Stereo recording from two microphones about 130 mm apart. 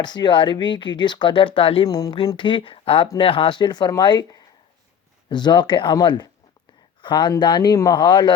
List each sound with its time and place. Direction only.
0.0 s speech: 35° left (ahead or behind)
2.0 s speech: 35° left (ahead or behind)